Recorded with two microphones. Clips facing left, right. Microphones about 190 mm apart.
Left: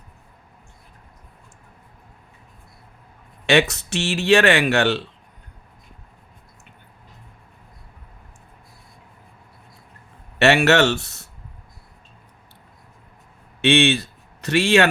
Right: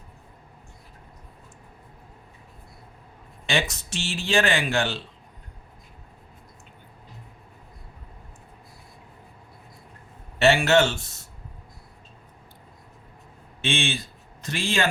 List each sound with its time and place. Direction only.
3.4 s speech: 70° left (ahead or behind)
10.3 s speech: 70° left (ahead or behind)
13.6 s a man's voice: 70° left (ahead or behind)